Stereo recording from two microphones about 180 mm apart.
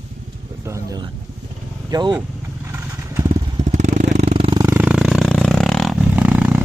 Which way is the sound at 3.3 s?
40° right (ahead or behind).